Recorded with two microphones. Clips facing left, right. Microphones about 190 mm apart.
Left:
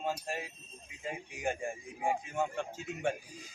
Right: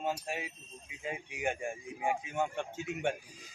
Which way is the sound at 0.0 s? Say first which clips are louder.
Right 1 dB; 5° right (ahead or behind).